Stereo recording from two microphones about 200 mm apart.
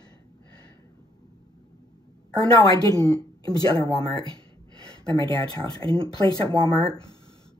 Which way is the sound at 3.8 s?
25° right (ahead or behind).